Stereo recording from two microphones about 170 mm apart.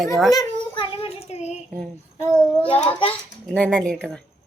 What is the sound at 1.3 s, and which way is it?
Speech, 40° left (ahead or behind).